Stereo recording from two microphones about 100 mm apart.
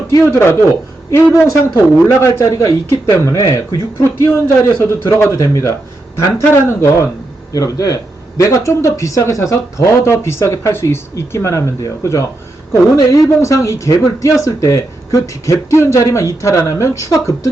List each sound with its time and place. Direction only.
0.1 s a man's voice: 25° left (ahead or behind)